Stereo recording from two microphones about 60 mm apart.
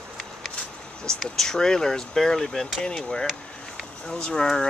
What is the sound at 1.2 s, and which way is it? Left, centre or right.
Speech, centre.